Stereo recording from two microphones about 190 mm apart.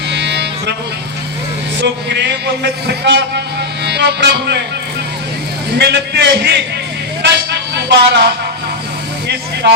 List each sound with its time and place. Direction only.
0.1 s music: 65° right (ahead or behind)
1.8 s a man's voice: 65° right (ahead or behind)
5.7 s a man's voice: 60° right (ahead or behind)
7.8 s speech: 60° right (ahead or behind)
9.6 s speech: 65° right (ahead or behind)